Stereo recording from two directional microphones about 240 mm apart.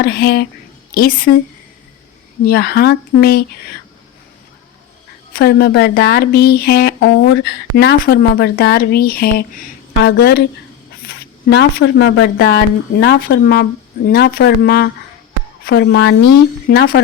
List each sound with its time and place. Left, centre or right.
0.0 s speech: left
2.4 s speech: left
5.3 s speech: left
16.6 s speech: left